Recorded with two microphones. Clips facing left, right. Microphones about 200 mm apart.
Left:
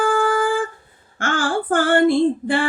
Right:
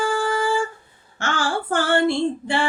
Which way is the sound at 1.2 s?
50° left (ahead or behind).